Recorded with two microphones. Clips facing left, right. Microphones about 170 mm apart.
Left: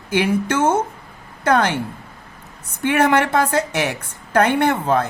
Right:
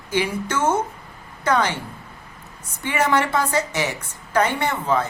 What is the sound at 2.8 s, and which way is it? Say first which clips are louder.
A woman's voice: left 4 dB; 55° left (ahead or behind).